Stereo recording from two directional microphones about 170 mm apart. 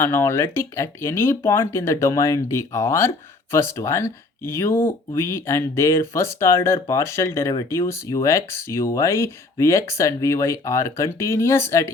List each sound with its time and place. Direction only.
0.0 s speech: 15° left (ahead or behind)